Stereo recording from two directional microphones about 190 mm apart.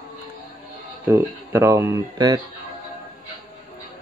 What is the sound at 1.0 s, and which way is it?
Speech, 10° right (ahead or behind).